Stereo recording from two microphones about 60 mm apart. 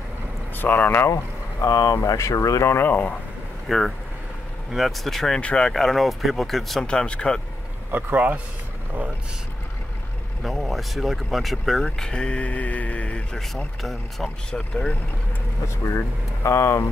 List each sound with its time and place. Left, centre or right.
0.6 s speech: left
1.1 s speech: left
2.1 s speech: left
2.7 s speech: left
3.6 s speech: centre
5.4 s speech: centre
6.8 s speech: centre
7.9 s speech: right
10.4 s speech: centre; by 13.4 s left
13.8 s speech: centre
14.5 s speech: centre
15.6 s speech: left